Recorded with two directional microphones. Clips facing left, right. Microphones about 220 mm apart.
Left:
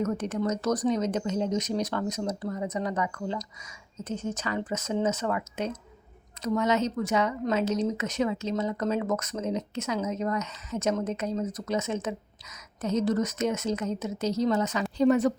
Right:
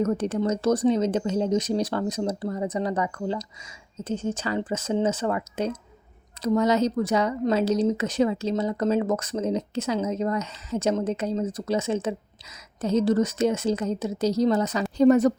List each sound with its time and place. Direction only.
0.0 s a woman's voice: 30° right (ahead or behind)